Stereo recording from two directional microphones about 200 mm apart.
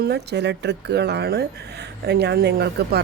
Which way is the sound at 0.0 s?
55° right (ahead or behind).